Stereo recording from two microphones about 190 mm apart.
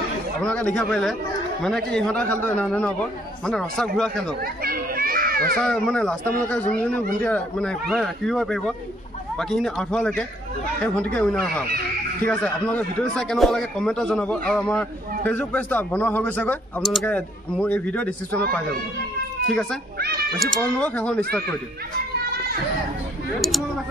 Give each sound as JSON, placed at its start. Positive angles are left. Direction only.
{"t": 0.4, "sound": "a man's voice", "side_deg": 5}
{"t": 4.4, "sound": "a child's voice", "side_deg": -50}
{"t": 5.6, "sound": "a man's voice", "side_deg": 5}
{"t": 19.5, "sound": "a man's voice", "side_deg": 5}
{"t": 20.0, "sound": "cat", "side_deg": -55}
{"t": 20.3, "sound": "a man's voice", "side_deg": 5}
{"t": 23.4, "sound": "a man's voice", "side_deg": 0}